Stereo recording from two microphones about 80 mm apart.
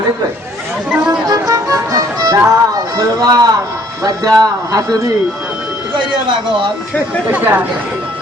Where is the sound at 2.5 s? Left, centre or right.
Right.